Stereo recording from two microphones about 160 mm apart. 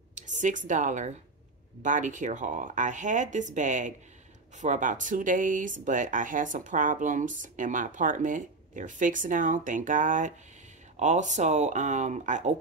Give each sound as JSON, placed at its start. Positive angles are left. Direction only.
{"t": 0.1, "sound": "speech", "side_deg": -50}